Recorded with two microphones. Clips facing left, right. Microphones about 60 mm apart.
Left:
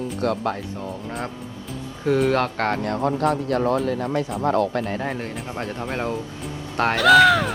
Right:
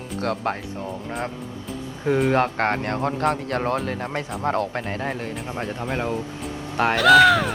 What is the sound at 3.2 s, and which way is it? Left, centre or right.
Speech, right.